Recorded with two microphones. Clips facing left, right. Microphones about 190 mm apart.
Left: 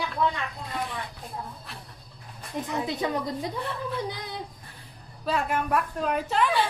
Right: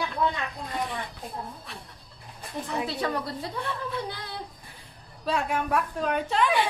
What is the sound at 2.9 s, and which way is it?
Speech, 15° left (ahead or behind).